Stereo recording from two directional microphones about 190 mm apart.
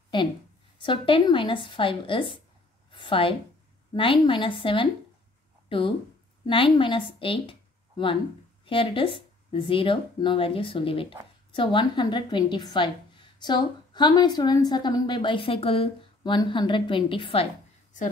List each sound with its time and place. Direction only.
0.8 s a woman's voice: 25° left (ahead or behind)
2.9 s a sound: 25° left (ahead or behind)
3.9 s a woman's voice: 25° left (ahead or behind)
8.6 s a woman's voice: 25° left (ahead or behind)